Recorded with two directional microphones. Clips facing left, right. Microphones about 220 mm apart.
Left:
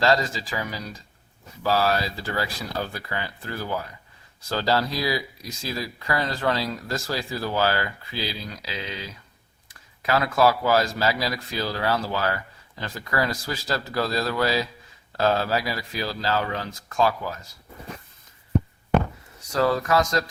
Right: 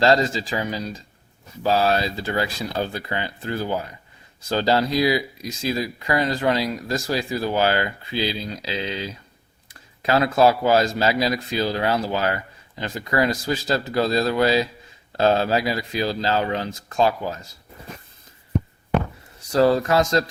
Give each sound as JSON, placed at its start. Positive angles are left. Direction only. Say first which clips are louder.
{"t": 0.0, "sound": "speech", "louder": "right 4 dB", "side_deg": -25}
{"t": 19.5, "sound": "speech", "louder": "right 4 dB", "side_deg": -30}